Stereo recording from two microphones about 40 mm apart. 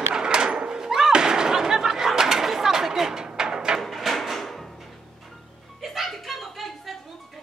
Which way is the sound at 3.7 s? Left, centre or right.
Centre.